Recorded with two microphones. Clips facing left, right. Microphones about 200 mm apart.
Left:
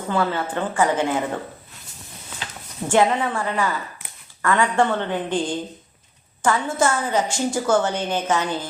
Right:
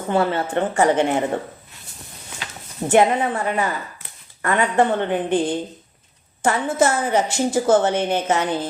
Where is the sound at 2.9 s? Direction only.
20° right (ahead or behind).